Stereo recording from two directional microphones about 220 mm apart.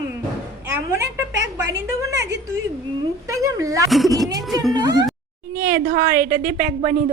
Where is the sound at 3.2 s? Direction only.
15° right (ahead or behind).